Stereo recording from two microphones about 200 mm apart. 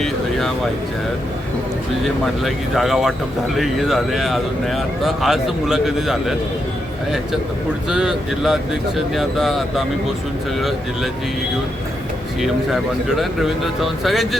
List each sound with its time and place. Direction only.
0.0 s a sound: centre (ahead or behind)
2.4 s speech: centre (ahead or behind)
7.9 s speech: 5° right (ahead or behind)
12.4 s speech: centre (ahead or behind)